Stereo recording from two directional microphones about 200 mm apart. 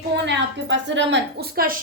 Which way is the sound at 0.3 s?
60° right (ahead or behind).